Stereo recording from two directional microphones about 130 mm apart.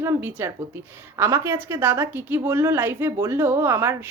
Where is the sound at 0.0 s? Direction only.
15° right (ahead or behind).